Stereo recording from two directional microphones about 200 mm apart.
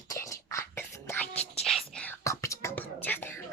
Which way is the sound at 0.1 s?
15° left (ahead or behind).